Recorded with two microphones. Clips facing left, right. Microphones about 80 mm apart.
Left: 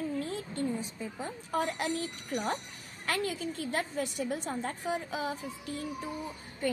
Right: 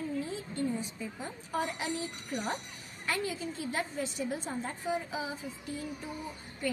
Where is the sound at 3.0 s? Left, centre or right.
Left.